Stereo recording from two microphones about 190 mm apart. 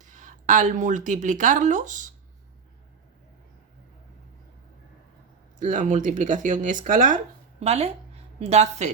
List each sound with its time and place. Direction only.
0.0 s speech: 40° right (ahead or behind)
5.5 s speech: 40° right (ahead or behind)
7.6 s speech: 35° right (ahead or behind)